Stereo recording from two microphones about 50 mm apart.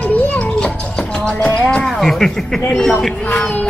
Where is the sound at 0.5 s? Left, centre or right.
Centre.